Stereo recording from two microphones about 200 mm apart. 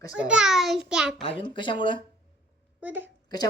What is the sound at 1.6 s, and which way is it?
Speech, 25° left (ahead or behind).